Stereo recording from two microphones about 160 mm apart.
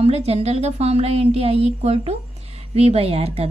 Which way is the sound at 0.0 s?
40° right (ahead or behind).